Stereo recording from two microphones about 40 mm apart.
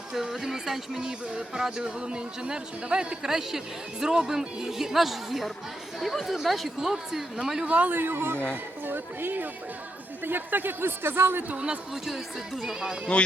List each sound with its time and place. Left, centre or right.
0.1 s speech: centre
1.3 s speech: right
3.2 s speech: centre
6.2 s speech: centre
6.7 s speech: centre
7.7 s a man's voice: right
7.9 s speech: right
8.9 s speech: right
12.6 s speech: centre